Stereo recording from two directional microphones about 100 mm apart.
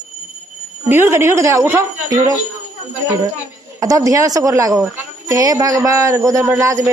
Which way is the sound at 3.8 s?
35° right (ahead or behind).